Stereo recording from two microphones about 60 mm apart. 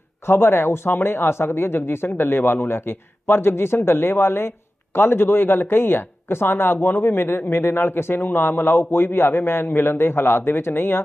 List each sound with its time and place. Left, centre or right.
0.3 s speech: left